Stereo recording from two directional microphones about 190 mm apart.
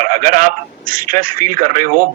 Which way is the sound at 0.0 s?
40° right (ahead or behind).